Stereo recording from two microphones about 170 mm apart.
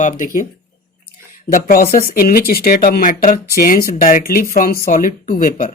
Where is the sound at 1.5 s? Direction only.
60° left (ahead or behind).